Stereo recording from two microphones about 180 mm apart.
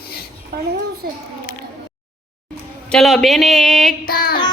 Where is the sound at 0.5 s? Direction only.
60° right (ahead or behind).